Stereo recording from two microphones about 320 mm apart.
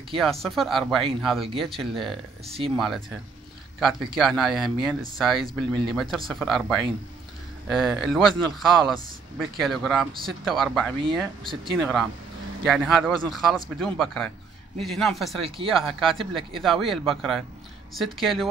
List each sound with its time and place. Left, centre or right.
0.2 s a man's voice: centre
4.2 s a man's voice: centre
15.4 s speech: centre
15.8 s a man's voice: centre